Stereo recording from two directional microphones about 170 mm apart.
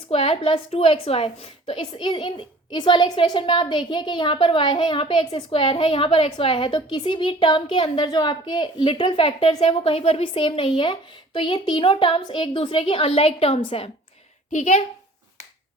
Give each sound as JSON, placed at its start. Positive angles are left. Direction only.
{"t": 0.1, "sound": "a woman's voice", "side_deg": 30}
{"t": 14.5, "sound": "a woman's voice", "side_deg": 45}